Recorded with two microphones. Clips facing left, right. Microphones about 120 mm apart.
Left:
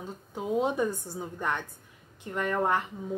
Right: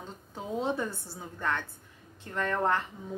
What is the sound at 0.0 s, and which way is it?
A woman's voice, 15° left (ahead or behind).